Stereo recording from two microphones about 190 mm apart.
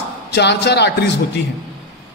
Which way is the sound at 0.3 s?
60° left (ahead or behind).